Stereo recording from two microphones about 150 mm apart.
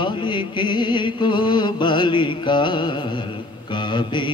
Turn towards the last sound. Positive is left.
turn(degrees=30)  # may be behind; listen again after turning